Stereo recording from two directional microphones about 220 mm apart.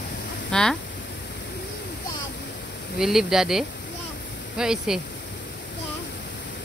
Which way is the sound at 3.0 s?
Centre (ahead or behind).